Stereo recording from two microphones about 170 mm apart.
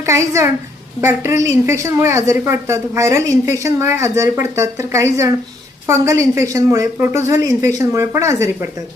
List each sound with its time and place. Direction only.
0.0 s a woman's voice: 15° right (ahead or behind)